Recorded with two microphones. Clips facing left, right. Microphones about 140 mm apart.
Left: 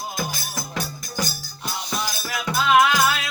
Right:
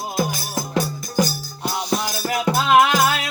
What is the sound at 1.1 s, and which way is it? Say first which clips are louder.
Music: right 9 dB; 35° right (ahead or behind).